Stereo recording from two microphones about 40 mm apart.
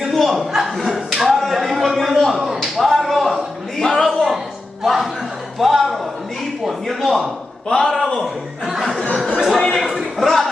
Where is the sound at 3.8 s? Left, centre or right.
Centre.